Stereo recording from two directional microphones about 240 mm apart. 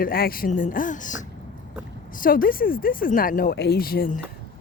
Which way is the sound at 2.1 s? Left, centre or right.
Left.